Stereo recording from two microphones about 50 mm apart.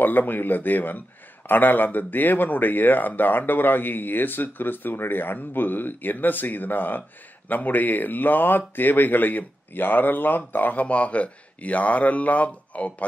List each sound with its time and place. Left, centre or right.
0.0 s speech: left